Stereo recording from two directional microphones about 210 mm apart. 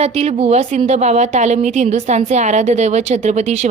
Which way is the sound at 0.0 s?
30° right (ahead or behind).